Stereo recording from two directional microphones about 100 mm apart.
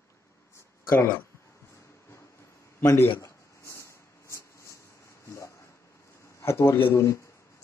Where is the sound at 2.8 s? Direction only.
25° left (ahead or behind).